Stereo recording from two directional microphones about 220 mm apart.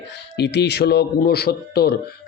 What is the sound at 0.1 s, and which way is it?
Mantra, 50° left (ahead or behind).